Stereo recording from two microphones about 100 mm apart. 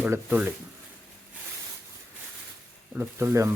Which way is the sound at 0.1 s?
20° right (ahead or behind).